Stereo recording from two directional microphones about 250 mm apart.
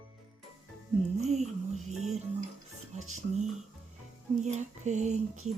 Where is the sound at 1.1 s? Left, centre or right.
Right.